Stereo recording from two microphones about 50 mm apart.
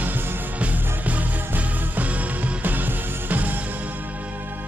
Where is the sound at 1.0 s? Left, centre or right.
Right.